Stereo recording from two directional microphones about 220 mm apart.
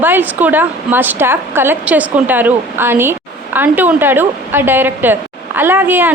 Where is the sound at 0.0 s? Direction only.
10° right (ahead or behind).